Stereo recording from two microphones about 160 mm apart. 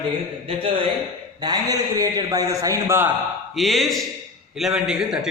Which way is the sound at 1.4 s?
25° right (ahead or behind).